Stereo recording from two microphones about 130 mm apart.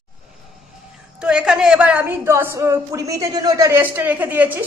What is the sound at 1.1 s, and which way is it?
A woman's voice, 5° right (ahead or behind).